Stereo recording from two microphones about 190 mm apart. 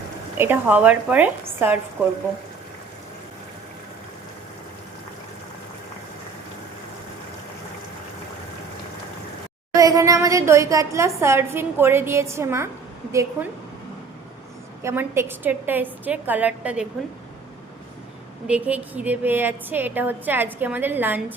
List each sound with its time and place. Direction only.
0.3 s a woman's voice: 10° right (ahead or behind)
9.7 s a woman's voice: 15° right (ahead or behind)
14.8 s a woman's voice: 15° right (ahead or behind)
18.4 s a woman's voice: 5° right (ahead or behind)